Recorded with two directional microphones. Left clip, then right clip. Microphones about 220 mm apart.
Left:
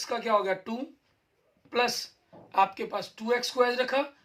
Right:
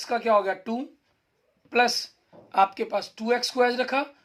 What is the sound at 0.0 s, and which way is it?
Speech, 45° right (ahead or behind).